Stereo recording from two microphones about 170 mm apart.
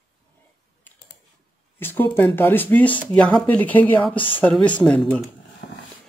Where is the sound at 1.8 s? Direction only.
10° left (ahead or behind).